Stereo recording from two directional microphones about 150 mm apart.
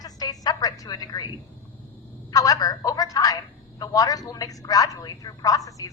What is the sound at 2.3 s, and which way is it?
A woman's voice, 25° left (ahead or behind).